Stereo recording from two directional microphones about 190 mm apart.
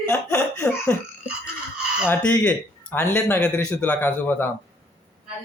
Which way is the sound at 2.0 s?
10° left (ahead or behind).